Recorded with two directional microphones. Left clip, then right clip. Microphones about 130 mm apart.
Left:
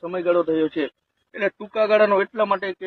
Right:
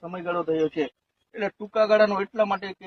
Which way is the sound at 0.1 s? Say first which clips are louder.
Left 6 dB; 40° right (ahead or behind).